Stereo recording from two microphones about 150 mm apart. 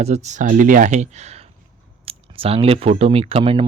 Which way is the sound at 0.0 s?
50° right (ahead or behind).